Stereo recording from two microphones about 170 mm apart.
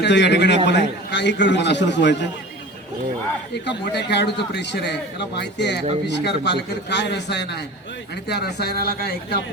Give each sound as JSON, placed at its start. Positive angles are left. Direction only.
{"t": 0.0, "sound": "a man's voice", "side_deg": 90}
{"t": 3.5, "sound": "a man's voice", "side_deg": 85}